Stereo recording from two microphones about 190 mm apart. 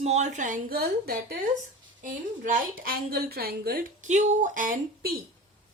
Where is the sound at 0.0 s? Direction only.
40° right (ahead or behind).